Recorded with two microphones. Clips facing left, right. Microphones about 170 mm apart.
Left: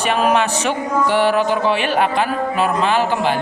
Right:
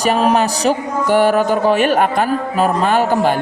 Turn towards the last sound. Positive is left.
turn(degrees=-45)  # may be behind; listen again after turning